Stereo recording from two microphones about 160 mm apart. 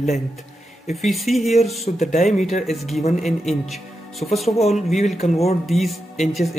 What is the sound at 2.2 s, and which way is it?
Speech, centre (ahead or behind).